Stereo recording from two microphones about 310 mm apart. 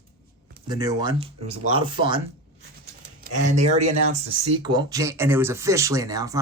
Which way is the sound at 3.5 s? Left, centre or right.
Right.